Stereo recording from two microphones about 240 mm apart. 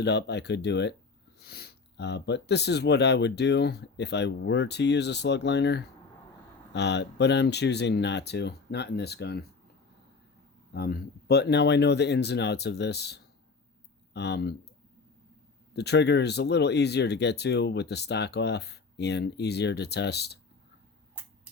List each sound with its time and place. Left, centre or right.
0.0 s speech: left
10.8 s speech: left
15.7 s speech: left